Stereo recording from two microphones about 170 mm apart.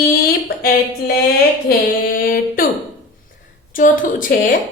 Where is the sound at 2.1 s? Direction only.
55° left (ahead or behind).